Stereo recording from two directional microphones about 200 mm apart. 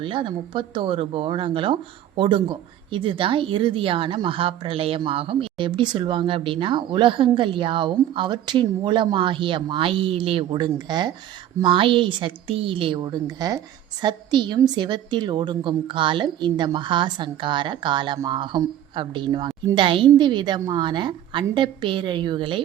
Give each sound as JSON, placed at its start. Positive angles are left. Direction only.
{"t": 0.0, "sound": "speech", "side_deg": -25}